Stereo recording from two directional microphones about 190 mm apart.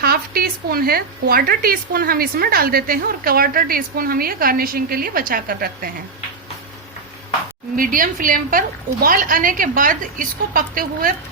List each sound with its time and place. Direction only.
0.0 s a woman's voice: 50° right (ahead or behind)
7.8 s a woman's voice: 45° right (ahead or behind)